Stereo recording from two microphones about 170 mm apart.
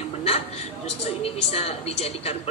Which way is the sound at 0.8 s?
35° left (ahead or behind).